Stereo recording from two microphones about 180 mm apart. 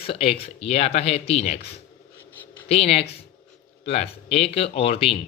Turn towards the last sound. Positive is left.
turn(degrees=30)  # may be behind; listen again after turning